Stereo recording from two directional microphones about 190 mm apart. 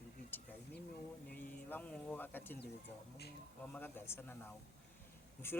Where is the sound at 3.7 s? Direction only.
10° left (ahead or behind).